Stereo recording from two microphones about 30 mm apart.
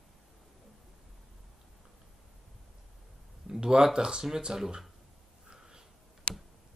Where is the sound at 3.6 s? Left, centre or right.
Right.